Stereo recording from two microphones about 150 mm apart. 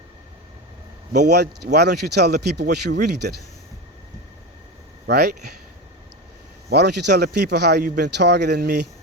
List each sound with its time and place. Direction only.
1.1 s speech: 90° right
5.0 s speech: 90° right
6.7 s speech: 90° right